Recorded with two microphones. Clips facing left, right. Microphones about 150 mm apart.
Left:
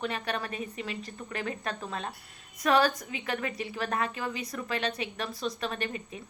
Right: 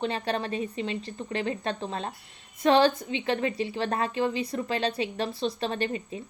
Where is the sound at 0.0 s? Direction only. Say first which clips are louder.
Right 4 dB; 30° right (ahead or behind).